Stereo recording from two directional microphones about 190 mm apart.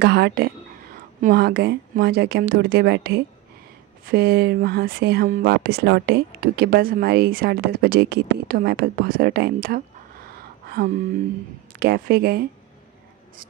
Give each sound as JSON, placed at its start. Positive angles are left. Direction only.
{"t": 0.0, "sound": "speech", "side_deg": -60}
{"t": 10.7, "sound": "a sound", "side_deg": -50}
{"t": 11.8, "sound": "speech", "side_deg": -55}